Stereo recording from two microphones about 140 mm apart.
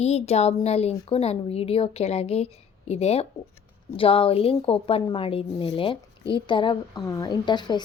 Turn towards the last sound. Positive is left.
turn(degrees=30)  # may be behind; listen again after turning